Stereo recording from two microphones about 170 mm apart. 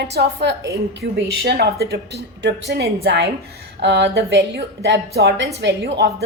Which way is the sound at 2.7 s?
80° right.